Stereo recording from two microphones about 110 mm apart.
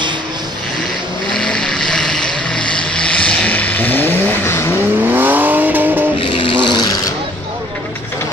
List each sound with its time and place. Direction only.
1.3 s vehicle: 5° left (ahead or behind)
5.0 s vehicle: 20° right (ahead or behind)
6.2 s a sound: 55° left (ahead or behind)
6.8 s vehicle: 35° left (ahead or behind)